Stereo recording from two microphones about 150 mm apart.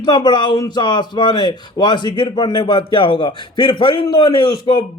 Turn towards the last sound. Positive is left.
turn(degrees=30)  # may be behind; listen again after turning